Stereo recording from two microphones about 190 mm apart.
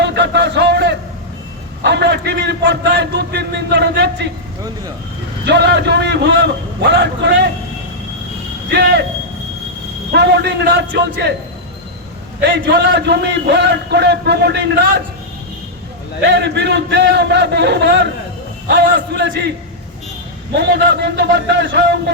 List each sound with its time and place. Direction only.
0.0 s a sound: 65° right (ahead or behind)
1.8 s a man's voice: 65° right (ahead or behind)
5.5 s a man's voice: 65° right (ahead or behind)
8.7 s a man's voice: 60° right (ahead or behind)
10.1 s a man's voice: 60° right (ahead or behind)
12.4 s a man's voice: 65° right (ahead or behind)
16.2 s a man's voice: 60° right (ahead or behind)